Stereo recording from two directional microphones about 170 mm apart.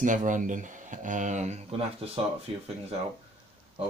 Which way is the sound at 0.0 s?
50° right (ahead or behind).